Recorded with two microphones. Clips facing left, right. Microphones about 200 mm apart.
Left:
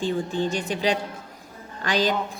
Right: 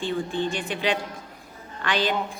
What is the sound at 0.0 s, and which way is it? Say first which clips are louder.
A woman's voice: left 2 dB; 40° left (ahead or behind).